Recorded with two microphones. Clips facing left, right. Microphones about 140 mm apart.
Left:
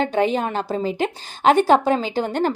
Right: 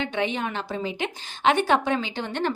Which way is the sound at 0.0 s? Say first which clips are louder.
Left 7 dB; 40° left (ahead or behind).